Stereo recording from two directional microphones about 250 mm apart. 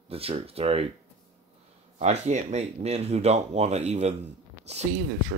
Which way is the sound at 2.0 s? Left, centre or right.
Right.